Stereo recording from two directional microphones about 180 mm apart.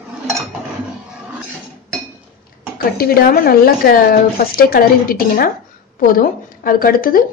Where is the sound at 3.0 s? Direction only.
55° left (ahead or behind).